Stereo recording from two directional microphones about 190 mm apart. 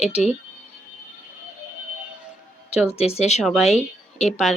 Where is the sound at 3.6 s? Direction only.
35° left (ahead or behind).